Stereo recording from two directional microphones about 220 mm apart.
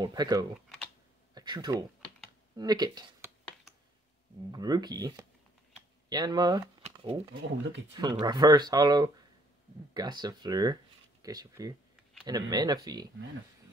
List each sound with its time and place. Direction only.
0.0 s speech: 20° right (ahead or behind)
4.5 s speech: 15° right (ahead or behind)
6.8 s shuffling cards: 25° right (ahead or behind)
7.9 s speech: 20° right (ahead or behind)